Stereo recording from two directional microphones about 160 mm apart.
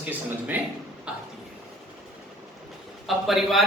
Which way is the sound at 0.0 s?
10° right (ahead or behind).